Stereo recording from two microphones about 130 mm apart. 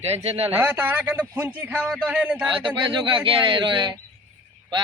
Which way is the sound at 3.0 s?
40° right (ahead or behind).